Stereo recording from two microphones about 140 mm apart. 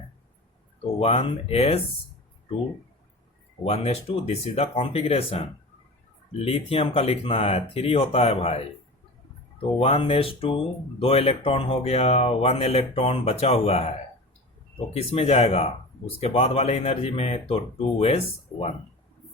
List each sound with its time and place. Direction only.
0.9 s speech: 45° left (ahead or behind)
3.6 s speech: 45° left (ahead or behind)
18.5 s speech: 20° left (ahead or behind)